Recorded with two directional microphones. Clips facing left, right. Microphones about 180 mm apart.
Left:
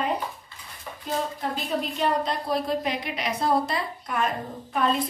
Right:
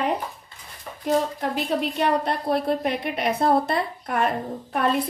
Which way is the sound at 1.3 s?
65° right (ahead or behind).